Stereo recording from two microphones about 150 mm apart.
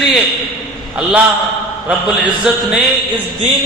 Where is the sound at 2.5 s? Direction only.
5° right (ahead or behind).